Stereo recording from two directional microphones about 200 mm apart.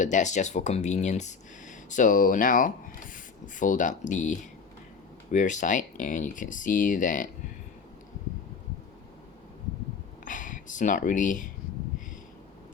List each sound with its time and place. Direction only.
0.0 s speech: 35° left (ahead or behind)
5.3 s speech: 40° left (ahead or behind)
10.2 s a sound: 40° left (ahead or behind)